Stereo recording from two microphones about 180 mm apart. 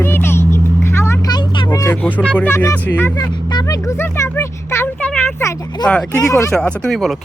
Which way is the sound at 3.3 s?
25° left (ahead or behind).